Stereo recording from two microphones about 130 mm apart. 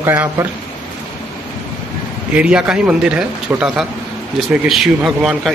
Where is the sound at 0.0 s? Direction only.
20° right (ahead or behind).